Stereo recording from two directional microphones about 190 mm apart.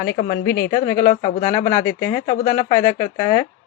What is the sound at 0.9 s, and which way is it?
Speech, 40° left (ahead or behind).